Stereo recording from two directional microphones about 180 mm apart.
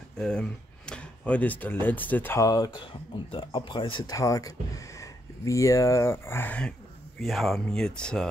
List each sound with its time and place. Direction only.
0.2 s speech: 5° left (ahead or behind)